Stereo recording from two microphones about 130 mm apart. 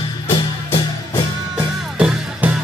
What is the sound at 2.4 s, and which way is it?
Music, 15° right (ahead or behind).